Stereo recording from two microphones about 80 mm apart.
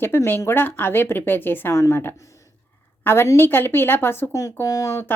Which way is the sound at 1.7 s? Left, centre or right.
Left.